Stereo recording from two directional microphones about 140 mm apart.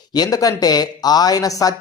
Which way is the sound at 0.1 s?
25° left (ahead or behind).